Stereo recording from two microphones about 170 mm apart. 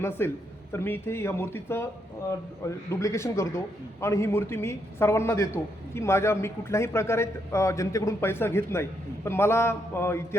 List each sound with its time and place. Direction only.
0.0 s a man's voice: 15° left (ahead or behind)